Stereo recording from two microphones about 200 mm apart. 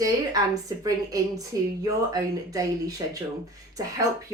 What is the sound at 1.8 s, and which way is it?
Speech, 15° right (ahead or behind).